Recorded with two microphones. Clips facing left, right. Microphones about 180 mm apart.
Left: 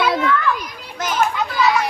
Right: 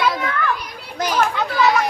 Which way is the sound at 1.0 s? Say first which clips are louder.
Right 1 dB; 35° right (ahead or behind).